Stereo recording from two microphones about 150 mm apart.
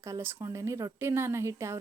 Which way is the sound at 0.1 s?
20° right (ahead or behind).